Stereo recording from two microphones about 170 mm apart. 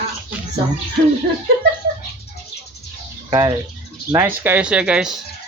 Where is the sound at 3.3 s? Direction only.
20° right (ahead or behind); by 5.2 s 5° right (ahead or behind).